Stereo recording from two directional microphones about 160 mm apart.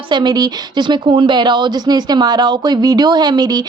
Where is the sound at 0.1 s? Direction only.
25° right (ahead or behind).